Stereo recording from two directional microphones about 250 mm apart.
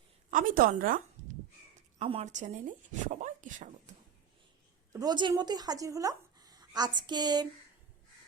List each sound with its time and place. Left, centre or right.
0.3 s speech: right
4.9 s speech: centre